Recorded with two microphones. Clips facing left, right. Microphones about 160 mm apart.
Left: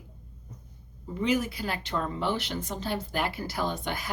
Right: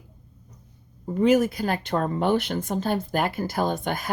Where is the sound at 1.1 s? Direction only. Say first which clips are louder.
Right 8 dB; 50° right (ahead or behind).